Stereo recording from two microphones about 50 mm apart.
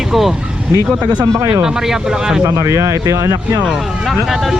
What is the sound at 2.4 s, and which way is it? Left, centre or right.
Speech, right.